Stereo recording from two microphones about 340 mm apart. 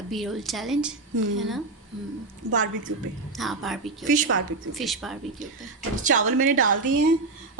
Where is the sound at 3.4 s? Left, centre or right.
Centre.